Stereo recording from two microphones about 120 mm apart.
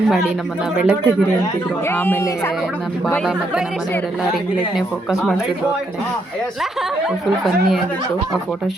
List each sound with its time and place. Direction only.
0.8 s speech: 10° right (ahead or behind)
1.9 s speech: 20° left (ahead or behind)